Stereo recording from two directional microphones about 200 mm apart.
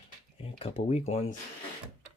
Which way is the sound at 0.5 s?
30° left (ahead or behind).